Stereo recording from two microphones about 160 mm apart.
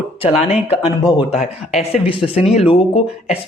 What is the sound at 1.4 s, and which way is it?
Speech, 40° left (ahead or behind).